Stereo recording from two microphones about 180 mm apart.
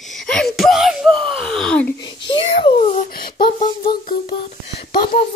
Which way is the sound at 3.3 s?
25° left (ahead or behind).